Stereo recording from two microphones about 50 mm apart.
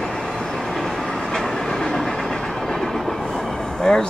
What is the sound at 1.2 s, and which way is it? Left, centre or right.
Train, centre.